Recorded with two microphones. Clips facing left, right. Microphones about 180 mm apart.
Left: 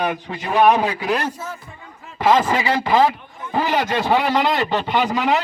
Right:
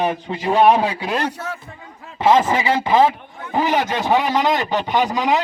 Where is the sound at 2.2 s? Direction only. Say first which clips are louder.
Right 1 dB; 25° right (ahead or behind).